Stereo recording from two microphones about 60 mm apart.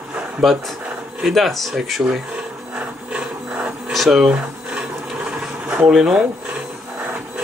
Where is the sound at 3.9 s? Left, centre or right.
Centre.